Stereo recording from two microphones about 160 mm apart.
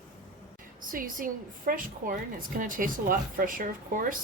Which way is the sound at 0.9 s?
60° right (ahead or behind).